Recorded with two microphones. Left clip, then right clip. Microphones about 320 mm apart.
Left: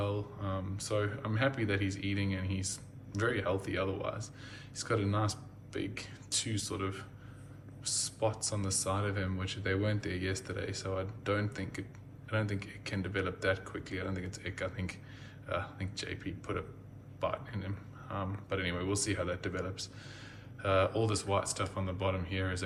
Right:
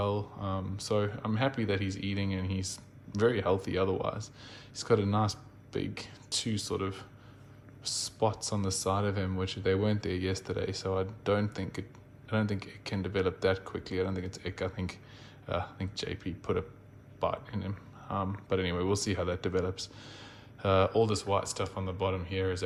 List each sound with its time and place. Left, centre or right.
0.0 s speech: centre